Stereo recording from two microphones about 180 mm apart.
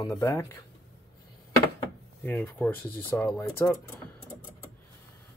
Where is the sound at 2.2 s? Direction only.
10° left (ahead or behind).